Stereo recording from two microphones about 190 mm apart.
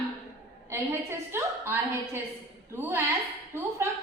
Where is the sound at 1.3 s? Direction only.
15° right (ahead or behind).